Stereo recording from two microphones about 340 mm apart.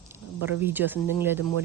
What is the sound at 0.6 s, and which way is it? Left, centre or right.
Speech, centre.